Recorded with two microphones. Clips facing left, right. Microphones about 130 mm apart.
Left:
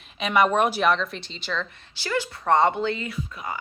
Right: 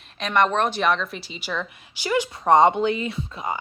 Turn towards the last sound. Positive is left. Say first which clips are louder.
# right 4 dB
turn(degrees=-25)  # may be behind; listen again after turning